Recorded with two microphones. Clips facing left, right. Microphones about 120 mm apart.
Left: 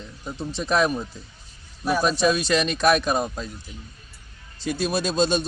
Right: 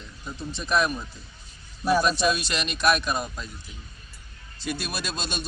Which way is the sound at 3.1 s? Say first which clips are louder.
Left 5 dB; 30° left (ahead or behind).